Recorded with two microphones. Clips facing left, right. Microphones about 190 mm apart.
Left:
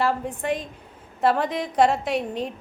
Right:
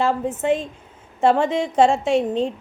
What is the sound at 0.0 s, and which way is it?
A woman's voice, 25° right (ahead or behind).